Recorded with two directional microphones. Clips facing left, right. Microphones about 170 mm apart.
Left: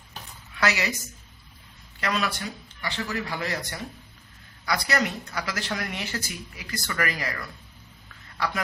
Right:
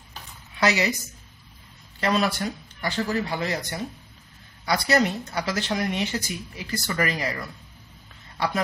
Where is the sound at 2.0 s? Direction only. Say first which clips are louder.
Right 5 dB; 35° right (ahead or behind).